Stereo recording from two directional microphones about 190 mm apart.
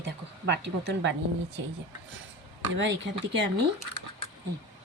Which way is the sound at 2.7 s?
75° right (ahead or behind).